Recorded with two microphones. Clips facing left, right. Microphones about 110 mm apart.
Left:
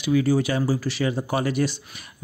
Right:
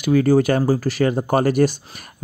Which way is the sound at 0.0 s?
50° right (ahead or behind).